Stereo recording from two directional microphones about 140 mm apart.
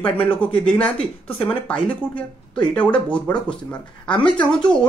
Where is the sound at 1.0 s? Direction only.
40° left (ahead or behind).